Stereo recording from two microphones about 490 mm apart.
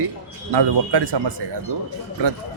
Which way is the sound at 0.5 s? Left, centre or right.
Right.